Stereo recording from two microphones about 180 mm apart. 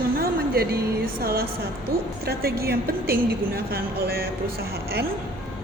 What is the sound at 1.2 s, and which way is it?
A woman's voice, 55° right (ahead or behind).